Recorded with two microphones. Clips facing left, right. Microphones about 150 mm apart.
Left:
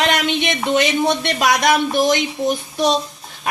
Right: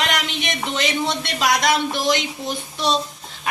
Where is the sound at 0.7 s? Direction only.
55° left (ahead or behind).